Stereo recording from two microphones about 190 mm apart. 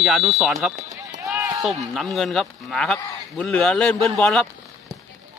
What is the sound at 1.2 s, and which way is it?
Run, 15° right (ahead or behind).